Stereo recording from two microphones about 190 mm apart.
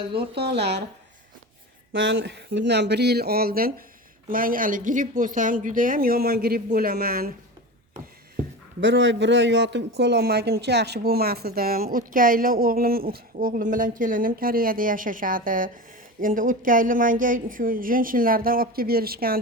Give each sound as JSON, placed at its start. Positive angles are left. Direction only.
{"t": 0.3, "sound": "speech", "side_deg": -60}
{"t": 1.9, "sound": "speech", "side_deg": -75}
{"t": 8.8, "sound": "speech", "side_deg": -75}